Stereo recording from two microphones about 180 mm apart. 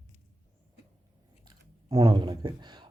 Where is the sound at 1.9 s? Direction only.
20° right (ahead or behind).